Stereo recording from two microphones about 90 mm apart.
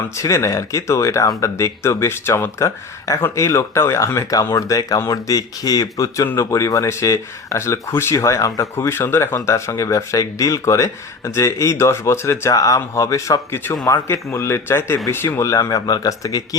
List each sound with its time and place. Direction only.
0.1 s speech: 35° left (ahead or behind)